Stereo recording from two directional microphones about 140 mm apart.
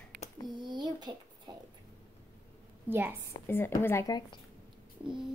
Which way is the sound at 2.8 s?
15° right (ahead or behind).